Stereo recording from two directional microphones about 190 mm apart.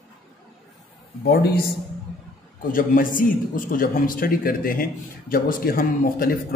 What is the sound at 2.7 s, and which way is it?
A man's voice, 45° left (ahead or behind).